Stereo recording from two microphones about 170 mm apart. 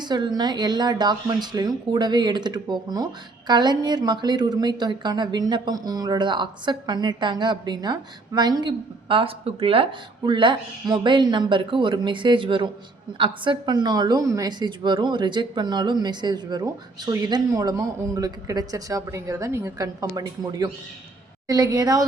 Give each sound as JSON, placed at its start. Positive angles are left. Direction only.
{"t": 0.0, "sound": "speech", "side_deg": -25}